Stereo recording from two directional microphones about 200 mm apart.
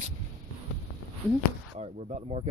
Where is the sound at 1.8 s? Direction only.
30° right (ahead or behind).